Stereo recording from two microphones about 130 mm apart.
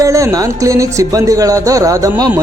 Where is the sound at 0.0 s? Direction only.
25° right (ahead or behind).